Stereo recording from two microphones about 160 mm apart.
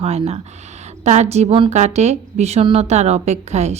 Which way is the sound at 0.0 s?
40° right (ahead or behind).